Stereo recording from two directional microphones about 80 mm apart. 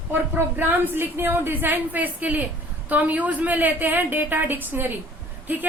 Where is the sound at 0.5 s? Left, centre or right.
Right.